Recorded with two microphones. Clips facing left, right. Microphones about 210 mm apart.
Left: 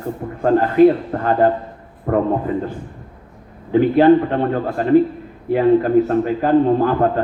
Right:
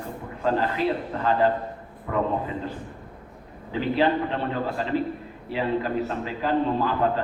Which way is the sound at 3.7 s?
50° left (ahead or behind).